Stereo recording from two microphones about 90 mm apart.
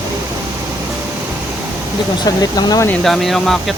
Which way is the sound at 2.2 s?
45° left (ahead or behind).